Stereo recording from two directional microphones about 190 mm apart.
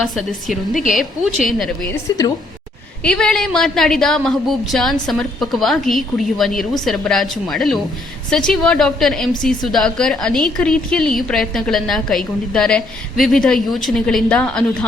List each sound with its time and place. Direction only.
1.5 s a woman's voice: centre (ahead or behind)
1.9 s a woman's voice: 15° left (ahead or behind)
3.0 s a woman's voice: 5° left (ahead or behind)